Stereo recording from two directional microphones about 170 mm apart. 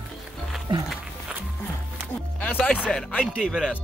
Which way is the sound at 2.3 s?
10° left (ahead or behind).